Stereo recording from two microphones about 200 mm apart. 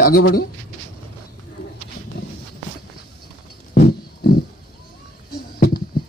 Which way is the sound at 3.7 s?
50° left (ahead or behind).